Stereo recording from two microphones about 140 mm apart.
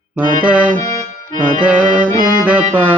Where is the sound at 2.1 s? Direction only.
75° right (ahead or behind).